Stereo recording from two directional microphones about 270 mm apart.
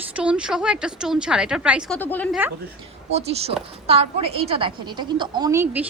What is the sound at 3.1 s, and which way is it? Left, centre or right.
A woman's voice, right.